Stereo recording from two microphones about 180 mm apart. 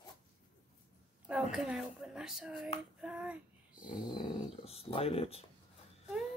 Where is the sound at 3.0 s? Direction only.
5° right (ahead or behind).